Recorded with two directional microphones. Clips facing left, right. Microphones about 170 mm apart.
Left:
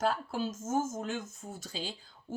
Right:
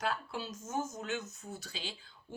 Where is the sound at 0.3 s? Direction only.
45° left (ahead or behind).